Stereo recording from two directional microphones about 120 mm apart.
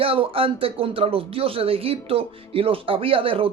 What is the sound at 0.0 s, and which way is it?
Speech, 50° right (ahead or behind).